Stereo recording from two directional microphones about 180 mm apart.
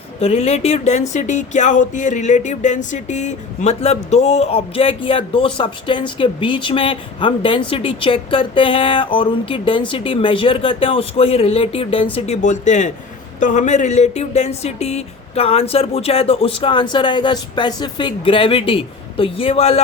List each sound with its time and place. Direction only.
0.2 s speech: 35° left (ahead or behind)